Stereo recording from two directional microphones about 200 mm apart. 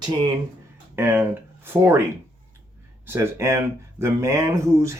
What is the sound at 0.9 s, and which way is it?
Speech, 10° right (ahead or behind).